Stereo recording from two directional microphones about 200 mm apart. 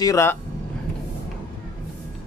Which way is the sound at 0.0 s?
15° left (ahead or behind).